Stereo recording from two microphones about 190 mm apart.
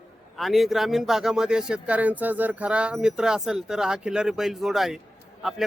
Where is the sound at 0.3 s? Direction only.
Centre (ahead or behind).